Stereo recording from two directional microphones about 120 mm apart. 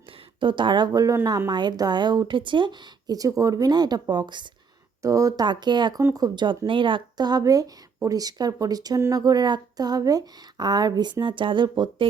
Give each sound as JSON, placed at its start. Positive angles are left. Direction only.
{"t": 0.3, "sound": "a woman's voice", "side_deg": -40}
{"t": 5.0, "sound": "a woman's voice", "side_deg": -25}